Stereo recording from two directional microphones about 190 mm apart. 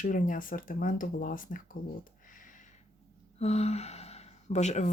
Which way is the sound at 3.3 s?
35° left (ahead or behind).